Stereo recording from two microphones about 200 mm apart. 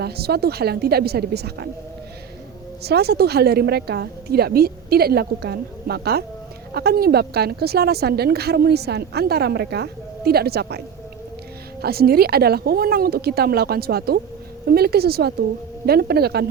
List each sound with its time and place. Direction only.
0.0 s a woman's voice: 50° right (ahead or behind)
2.8 s a woman's voice: 55° right (ahead or behind)